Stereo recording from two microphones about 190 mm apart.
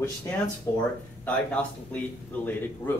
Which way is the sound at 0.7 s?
15° left (ahead or behind).